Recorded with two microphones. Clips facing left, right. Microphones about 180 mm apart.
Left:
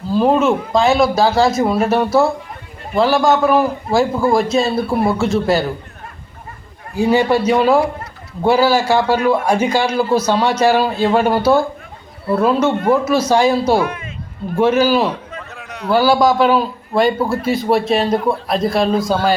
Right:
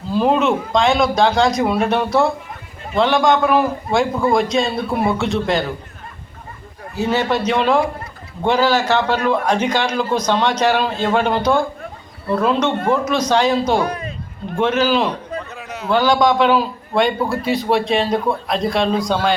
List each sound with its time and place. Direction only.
0.1 s a man's voice: centre (ahead or behind)
6.9 s a man's voice: 15° left (ahead or behind)
13.8 s a man's voice: 35° right (ahead or behind)
14.6 s a man's voice: 10° left (ahead or behind)